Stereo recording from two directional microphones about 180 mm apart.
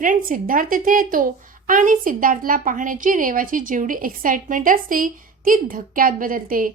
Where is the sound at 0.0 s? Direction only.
50° right (ahead or behind).